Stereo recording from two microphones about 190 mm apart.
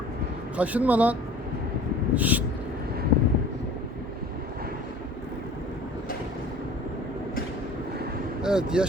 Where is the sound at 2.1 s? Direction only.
10° right (ahead or behind).